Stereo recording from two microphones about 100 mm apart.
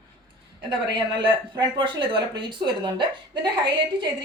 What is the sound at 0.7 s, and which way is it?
Speech, 55° right (ahead or behind).